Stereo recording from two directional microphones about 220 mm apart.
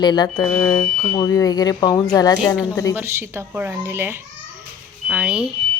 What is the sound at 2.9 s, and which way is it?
A woman's voice, 10° right (ahead or behind).